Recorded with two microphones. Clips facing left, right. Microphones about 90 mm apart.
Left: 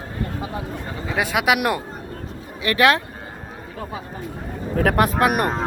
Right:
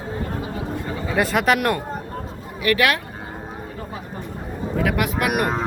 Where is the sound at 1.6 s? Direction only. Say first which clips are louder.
Right 1 dB; 15° left (ahead or behind).